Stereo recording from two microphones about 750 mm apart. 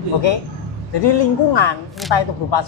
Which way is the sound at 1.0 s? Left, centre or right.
Left.